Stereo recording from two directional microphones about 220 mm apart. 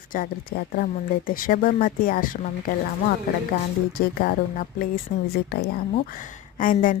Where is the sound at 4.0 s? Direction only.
40° left (ahead or behind).